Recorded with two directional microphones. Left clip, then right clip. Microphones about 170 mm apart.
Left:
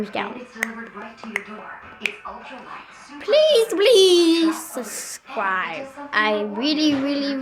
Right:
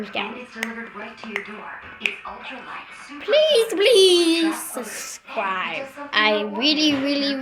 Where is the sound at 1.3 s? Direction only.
Centre (ahead or behind); by 5.2 s 20° left (ahead or behind).